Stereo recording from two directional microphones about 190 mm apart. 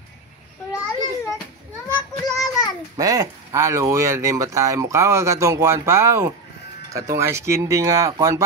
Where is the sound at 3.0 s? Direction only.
20° right (ahead or behind).